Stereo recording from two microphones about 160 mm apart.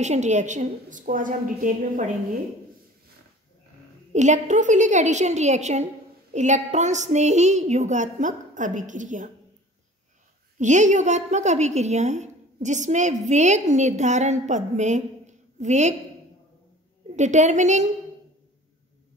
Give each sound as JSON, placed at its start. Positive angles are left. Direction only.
{"t": 0.0, "sound": "a woman's voice", "side_deg": -45}
{"t": 4.1, "sound": "a woman's voice", "side_deg": -50}
{"t": 10.6, "sound": "a woman's voice", "side_deg": -50}
{"t": 17.1, "sound": "a woman's voice", "side_deg": -50}